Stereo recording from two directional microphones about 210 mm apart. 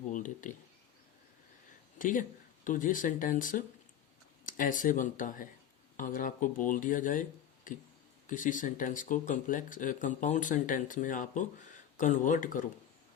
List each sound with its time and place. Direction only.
0.1 s speech: 35° left (ahead or behind)
2.0 s speech: 40° left (ahead or behind)